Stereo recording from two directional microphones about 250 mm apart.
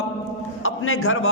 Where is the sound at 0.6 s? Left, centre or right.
Left.